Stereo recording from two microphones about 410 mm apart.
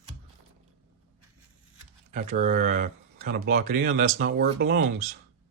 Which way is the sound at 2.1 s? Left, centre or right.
Centre.